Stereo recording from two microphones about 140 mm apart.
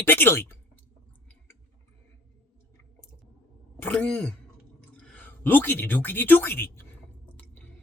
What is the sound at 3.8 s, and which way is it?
Speech, 10° left (ahead or behind).